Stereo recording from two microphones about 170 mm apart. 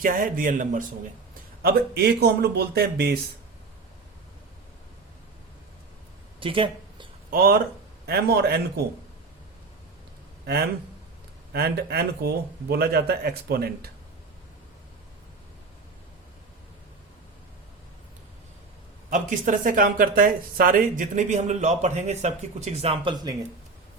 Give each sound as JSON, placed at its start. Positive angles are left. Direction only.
{"t": 0.0, "sound": "speech", "side_deg": -55}
{"t": 1.6, "sound": "speech", "side_deg": -70}
{"t": 6.4, "sound": "a sound", "side_deg": -30}
{"t": 7.3, "sound": "speech", "side_deg": -60}
{"t": 10.4, "sound": "a man's voice", "side_deg": -70}
{"t": 19.1, "sound": "speech", "side_deg": -50}